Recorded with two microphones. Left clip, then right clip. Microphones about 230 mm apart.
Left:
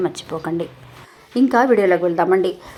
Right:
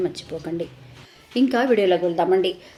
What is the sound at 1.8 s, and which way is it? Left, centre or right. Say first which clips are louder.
Speech: left 3 dB; centre.